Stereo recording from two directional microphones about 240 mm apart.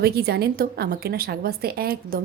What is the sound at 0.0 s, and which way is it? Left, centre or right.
A woman's voice, right.